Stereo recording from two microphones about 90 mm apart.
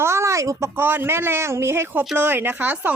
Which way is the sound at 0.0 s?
30° right (ahead or behind).